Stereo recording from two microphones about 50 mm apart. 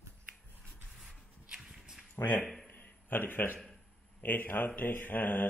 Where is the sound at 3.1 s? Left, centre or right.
Left.